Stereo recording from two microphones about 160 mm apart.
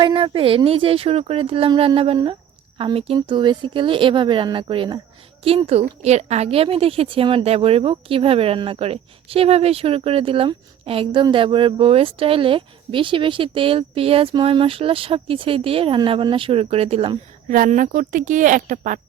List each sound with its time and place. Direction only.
0.0 s a woman's voice: 30° right (ahead or behind)
17.5 s a woman's voice: 55° right (ahead or behind)